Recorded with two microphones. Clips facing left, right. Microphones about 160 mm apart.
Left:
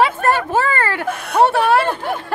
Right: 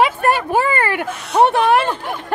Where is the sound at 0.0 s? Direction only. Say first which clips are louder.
Even; 15° right (ahead or behind).